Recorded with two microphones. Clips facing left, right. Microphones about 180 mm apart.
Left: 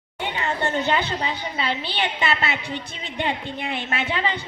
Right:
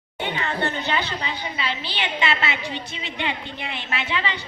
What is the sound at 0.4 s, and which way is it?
A woman's voice, 45° left (ahead or behind).